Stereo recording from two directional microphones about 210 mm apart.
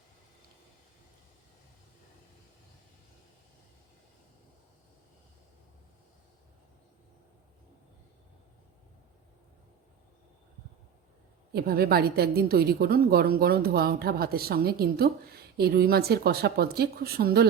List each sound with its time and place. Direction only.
11.5 s a woman's voice: 45° right (ahead or behind)